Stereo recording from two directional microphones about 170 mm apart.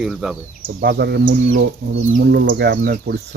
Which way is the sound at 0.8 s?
75° right (ahead or behind).